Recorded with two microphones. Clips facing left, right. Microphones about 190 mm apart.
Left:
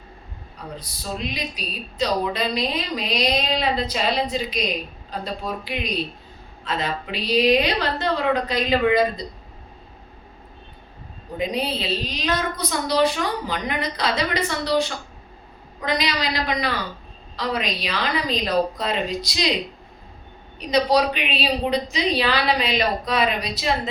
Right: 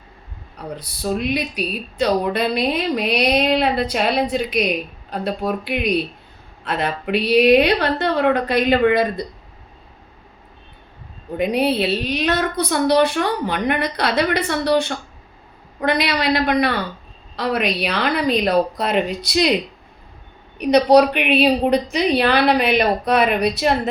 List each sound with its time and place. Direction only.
0.8 s speech: 60° right (ahead or behind)
11.3 s speech: 60° right (ahead or behind)
20.6 s speech: 60° right (ahead or behind)